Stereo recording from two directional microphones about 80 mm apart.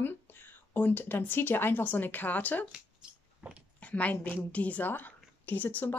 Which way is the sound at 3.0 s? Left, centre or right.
Centre.